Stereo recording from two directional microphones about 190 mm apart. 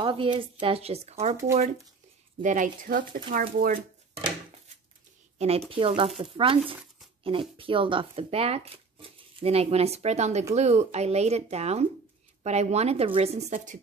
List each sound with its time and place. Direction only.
0.0 s speech: 25° right (ahead or behind)
2.4 s a woman's voice: 45° right (ahead or behind)
5.4 s speech: 30° right (ahead or behind)